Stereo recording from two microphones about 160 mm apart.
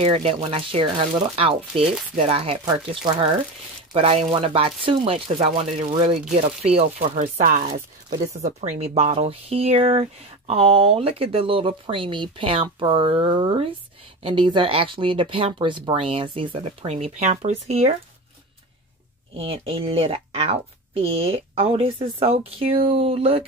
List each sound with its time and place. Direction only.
0.0 s speech: 40° right (ahead or behind)
19.3 s speech: 35° right (ahead or behind)